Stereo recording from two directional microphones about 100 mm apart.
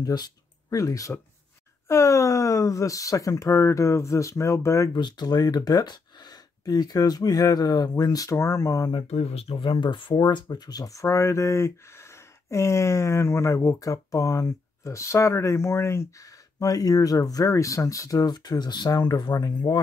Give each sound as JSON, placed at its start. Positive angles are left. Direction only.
{"t": 0.0, "sound": "speech", "side_deg": 40}
{"t": 4.9, "sound": "speech", "side_deg": 45}
{"t": 8.9, "sound": "speech", "side_deg": 90}
{"t": 9.6, "sound": "speech", "side_deg": 55}